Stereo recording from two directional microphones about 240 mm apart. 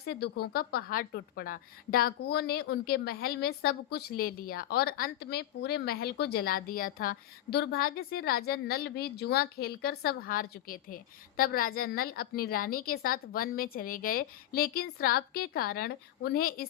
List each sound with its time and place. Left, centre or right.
0.0 s a woman's voice: left